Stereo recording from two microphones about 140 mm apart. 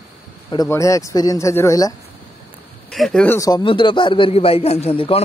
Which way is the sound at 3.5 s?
35° left (ahead or behind).